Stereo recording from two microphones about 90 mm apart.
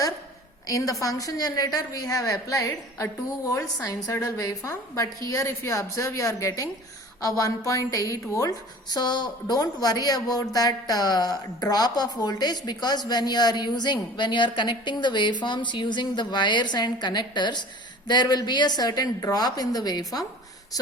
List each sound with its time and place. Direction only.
0.7 s a woman's voice: 40° left (ahead or behind)